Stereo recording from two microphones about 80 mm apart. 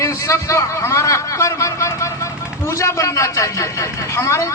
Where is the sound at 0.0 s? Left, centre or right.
Left.